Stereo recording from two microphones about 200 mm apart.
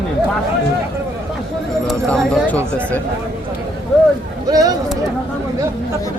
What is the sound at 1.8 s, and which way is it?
Speech, 5° left (ahead or behind).